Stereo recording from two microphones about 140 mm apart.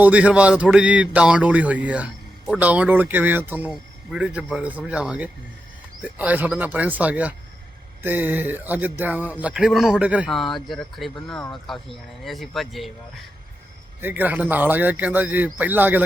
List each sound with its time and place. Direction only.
0.0 s speech: 10° right (ahead or behind)
10.2 s speech: centre (ahead or behind)
14.0 s speech: 10° right (ahead or behind)